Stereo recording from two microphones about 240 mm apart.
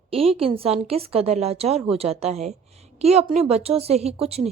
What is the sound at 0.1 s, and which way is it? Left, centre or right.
Speech, right.